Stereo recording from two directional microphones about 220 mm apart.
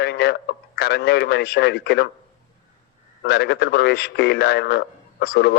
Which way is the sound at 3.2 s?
50° left (ahead or behind).